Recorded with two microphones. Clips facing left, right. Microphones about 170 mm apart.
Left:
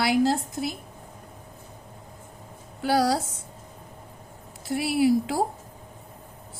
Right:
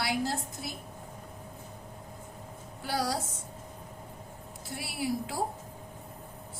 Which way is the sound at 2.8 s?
90° left.